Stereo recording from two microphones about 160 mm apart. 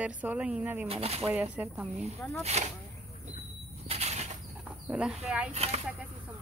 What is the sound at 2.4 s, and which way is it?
Speech, 45° right (ahead or behind).